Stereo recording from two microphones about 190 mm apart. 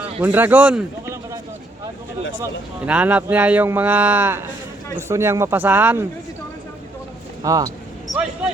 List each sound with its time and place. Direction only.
0.2 s speech: 10° right (ahead or behind)
2.4 s speech: 10° right (ahead or behind)
7.4 s speech: 20° right (ahead or behind)